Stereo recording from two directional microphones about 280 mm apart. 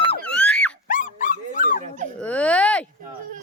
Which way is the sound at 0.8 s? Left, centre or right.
Left.